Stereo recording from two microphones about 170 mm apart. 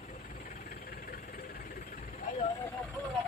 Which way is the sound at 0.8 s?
60° left (ahead or behind).